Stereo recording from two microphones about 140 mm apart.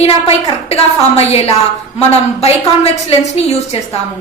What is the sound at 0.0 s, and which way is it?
A woman's voice, 45° left (ahead or behind).